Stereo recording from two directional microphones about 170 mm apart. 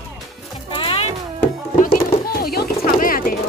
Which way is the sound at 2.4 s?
60° left (ahead or behind).